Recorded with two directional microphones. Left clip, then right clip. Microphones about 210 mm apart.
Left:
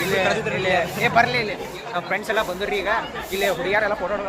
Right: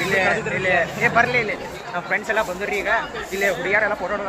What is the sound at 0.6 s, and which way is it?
Speech, centre (ahead or behind).